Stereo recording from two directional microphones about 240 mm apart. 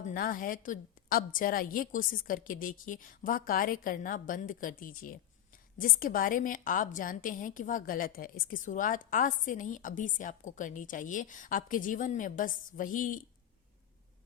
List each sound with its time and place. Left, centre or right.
0.0 s a woman's voice: left